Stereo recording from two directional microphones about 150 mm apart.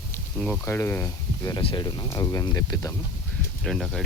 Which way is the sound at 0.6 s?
15° left (ahead or behind).